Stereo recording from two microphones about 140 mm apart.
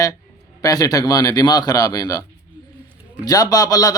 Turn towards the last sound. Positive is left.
turn(degrees=25)  # may be behind; listen again after turning